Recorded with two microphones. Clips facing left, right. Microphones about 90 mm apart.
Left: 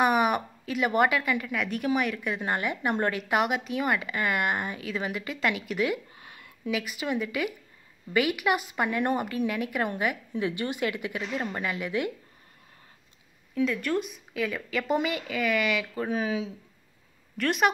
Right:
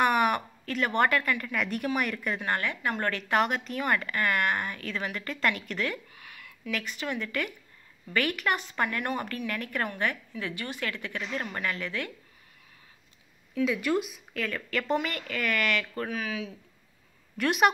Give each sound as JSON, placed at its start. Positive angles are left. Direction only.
{"t": 0.0, "sound": "a woman's voice", "side_deg": 10}
{"t": 2.4, "sound": "a woman's voice", "side_deg": 15}
{"t": 6.1, "sound": "a sound", "side_deg": 25}
{"t": 6.7, "sound": "a woman's voice", "side_deg": 10}
{"t": 13.7, "sound": "a woman's voice", "side_deg": -5}
{"t": 16.1, "sound": "speech", "side_deg": 25}
{"t": 17.4, "sound": "a woman's voice", "side_deg": -5}